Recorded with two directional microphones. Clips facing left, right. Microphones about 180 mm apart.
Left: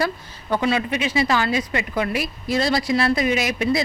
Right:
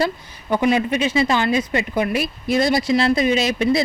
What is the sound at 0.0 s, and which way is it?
A woman's voice, 15° right (ahead or behind).